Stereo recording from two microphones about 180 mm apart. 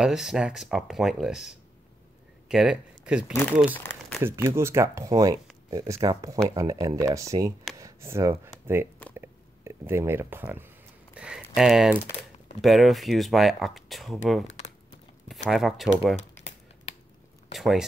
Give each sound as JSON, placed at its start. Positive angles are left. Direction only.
{"t": 0.0, "sound": "speech", "side_deg": -5}
{"t": 3.7, "sound": "a sound", "side_deg": 10}
{"t": 4.2, "sound": "speech", "side_deg": -15}
{"t": 9.1, "sound": "a sound", "side_deg": -15}
{"t": 11.5, "sound": "speech", "side_deg": 0}
{"t": 16.2, "sound": "crumpling", "side_deg": 40}
{"t": 17.6, "sound": "speech", "side_deg": 0}